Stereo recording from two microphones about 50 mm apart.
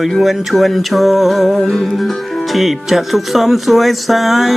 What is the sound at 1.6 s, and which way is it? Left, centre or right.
Music, centre.